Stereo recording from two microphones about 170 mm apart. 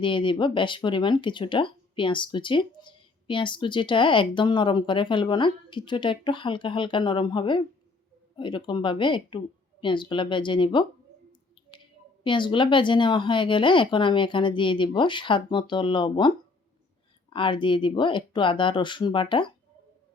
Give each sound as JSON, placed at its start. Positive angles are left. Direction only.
{"t": 0.0, "sound": "speech", "side_deg": 30}
{"t": 12.2, "sound": "speech", "side_deg": 30}